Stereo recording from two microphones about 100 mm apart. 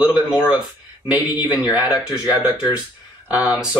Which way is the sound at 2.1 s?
40° left (ahead or behind).